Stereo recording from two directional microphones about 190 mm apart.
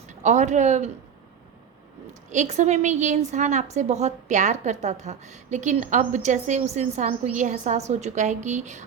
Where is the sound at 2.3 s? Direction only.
40° right (ahead or behind).